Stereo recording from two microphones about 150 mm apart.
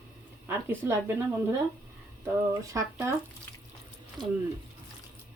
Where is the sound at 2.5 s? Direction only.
20° right (ahead or behind).